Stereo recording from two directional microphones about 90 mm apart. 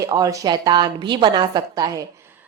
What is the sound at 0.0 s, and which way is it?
A woman's voice, 40° right (ahead or behind).